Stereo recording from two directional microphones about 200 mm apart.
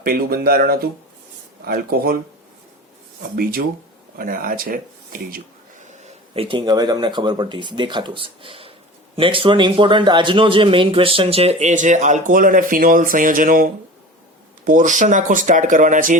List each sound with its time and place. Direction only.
0.0 s speech: 45° right (ahead or behind)
3.3 s speech: 45° right (ahead or behind)
5.8 s speech: 35° right (ahead or behind)
14.7 s speech: 40° right (ahead or behind)